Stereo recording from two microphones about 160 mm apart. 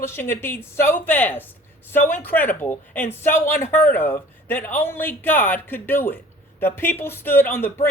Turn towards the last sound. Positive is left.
turn(degrees=15)  # may be behind; listen again after turning